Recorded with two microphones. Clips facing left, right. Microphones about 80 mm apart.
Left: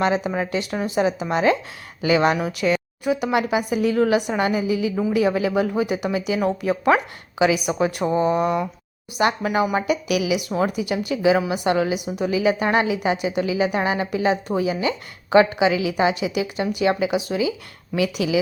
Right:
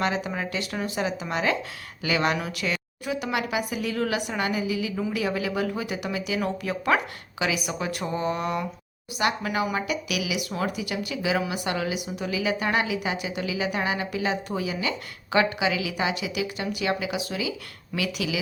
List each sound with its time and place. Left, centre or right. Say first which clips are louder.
0.0 s a woman's voice: left 6 dB; left